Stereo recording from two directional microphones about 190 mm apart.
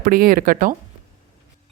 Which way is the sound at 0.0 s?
50° right (ahead or behind).